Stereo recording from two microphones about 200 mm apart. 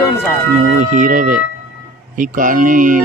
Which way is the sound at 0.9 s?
40° right (ahead or behind).